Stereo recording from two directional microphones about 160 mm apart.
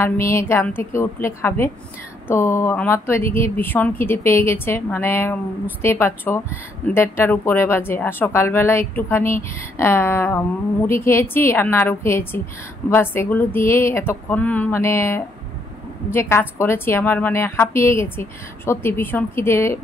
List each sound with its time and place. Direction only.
0.0 s a woman's voice: 15° left (ahead or behind)